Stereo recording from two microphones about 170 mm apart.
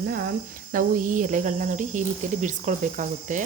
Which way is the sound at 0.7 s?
50° right (ahead or behind).